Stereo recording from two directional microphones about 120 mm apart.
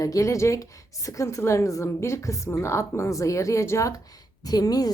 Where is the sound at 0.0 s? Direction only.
30° left (ahead or behind).